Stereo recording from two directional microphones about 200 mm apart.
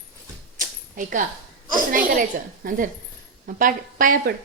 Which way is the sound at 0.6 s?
40° right (ahead or behind).